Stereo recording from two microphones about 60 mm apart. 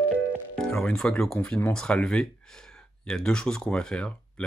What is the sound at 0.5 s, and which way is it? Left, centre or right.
Music, centre.